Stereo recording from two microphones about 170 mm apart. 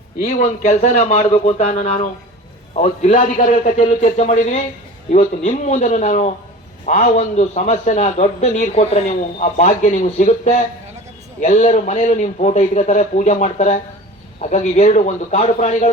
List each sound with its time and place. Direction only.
0.3 s a man's voice: 50° left (ahead or behind)